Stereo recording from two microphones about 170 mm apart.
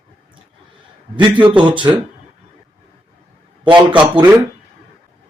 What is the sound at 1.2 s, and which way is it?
Speech, 30° right (ahead or behind).